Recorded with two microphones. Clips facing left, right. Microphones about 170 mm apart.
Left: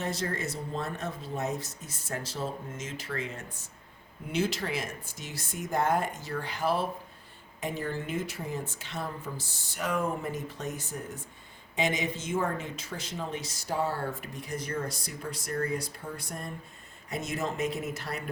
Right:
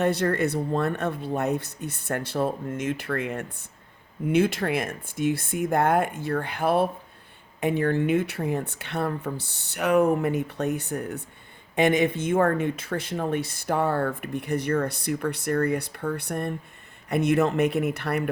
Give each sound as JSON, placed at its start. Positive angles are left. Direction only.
{"t": 0.0, "sound": "speech", "side_deg": -65}